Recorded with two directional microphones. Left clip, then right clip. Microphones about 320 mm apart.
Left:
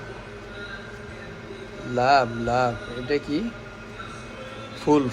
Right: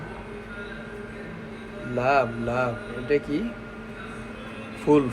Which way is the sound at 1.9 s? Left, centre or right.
Centre.